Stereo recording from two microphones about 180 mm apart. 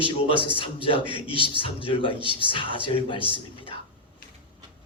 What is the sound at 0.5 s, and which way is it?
A man's voice, 30° left (ahead or behind).